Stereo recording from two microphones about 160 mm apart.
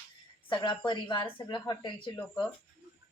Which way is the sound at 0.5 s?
30° left (ahead or behind).